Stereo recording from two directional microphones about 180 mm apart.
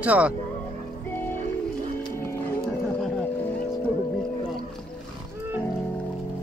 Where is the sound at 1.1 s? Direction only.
10° left (ahead or behind).